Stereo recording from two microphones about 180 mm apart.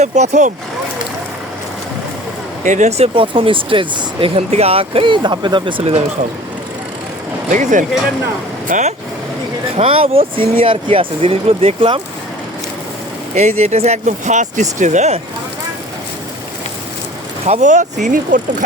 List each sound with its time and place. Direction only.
0.0 s speech: 40° right (ahead or behind)
2.6 s speech: 40° right (ahead or behind)
7.5 s speech: 45° right (ahead or behind)
9.7 s speech: 30° right (ahead or behind)
13.3 s speech: 35° right (ahead or behind)
17.4 s speech: 40° right (ahead or behind)